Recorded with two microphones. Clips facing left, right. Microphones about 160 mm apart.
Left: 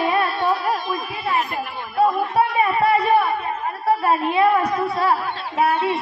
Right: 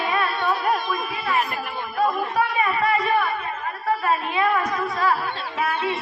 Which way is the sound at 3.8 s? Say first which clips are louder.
Left 4 dB; 35° left (ahead or behind).